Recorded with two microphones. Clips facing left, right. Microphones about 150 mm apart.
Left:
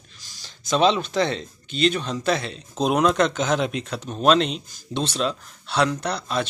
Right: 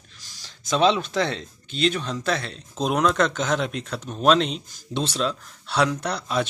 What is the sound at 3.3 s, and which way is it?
Speech, 5° left (ahead or behind).